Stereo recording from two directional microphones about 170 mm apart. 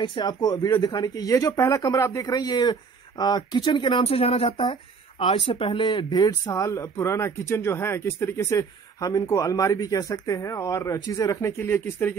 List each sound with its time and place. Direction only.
0.0 s speech: 25° left (ahead or behind)